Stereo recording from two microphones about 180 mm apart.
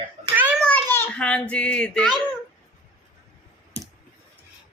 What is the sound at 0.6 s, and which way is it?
A child's voice, 10° left (ahead or behind).